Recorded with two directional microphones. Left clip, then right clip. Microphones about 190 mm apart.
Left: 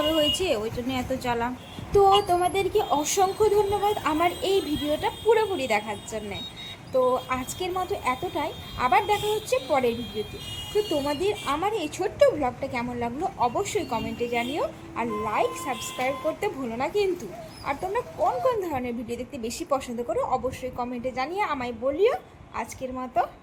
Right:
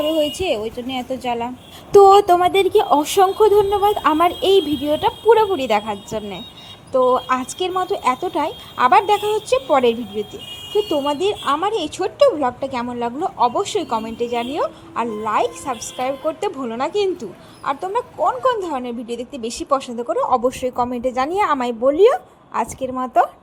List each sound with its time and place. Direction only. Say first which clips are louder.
0.0 s a woman's voice: right 4 dB; 15° right (ahead or behind)
1.9 s speech: right 10 dB; 50° right (ahead or behind); by 20.4 s 25° right (ahead or behind)
20.5 s a woman's voice: right 10 dB; 45° right (ahead or behind)